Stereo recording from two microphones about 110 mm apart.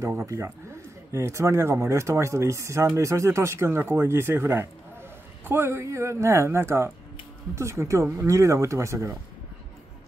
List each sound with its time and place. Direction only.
0.0 s speech: 25° right (ahead or behind)